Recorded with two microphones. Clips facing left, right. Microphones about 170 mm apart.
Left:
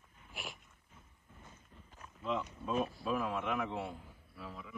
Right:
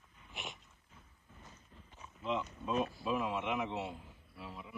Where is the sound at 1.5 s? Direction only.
5° left (ahead or behind).